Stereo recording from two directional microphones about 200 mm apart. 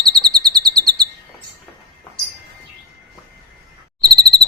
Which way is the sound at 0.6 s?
50° right (ahead or behind).